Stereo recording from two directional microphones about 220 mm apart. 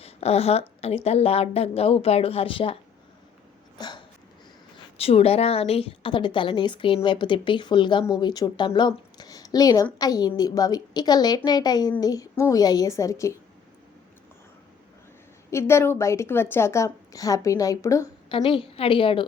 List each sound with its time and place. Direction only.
0.0 s a woman's voice: 30° left (ahead or behind)
3.8 s hiccup: 20° left (ahead or behind)
4.9 s a woman's voice: 25° left (ahead or behind)
15.4 s a woman's voice: 10° left (ahead or behind)
18.3 s a woman's voice: 25° left (ahead or behind)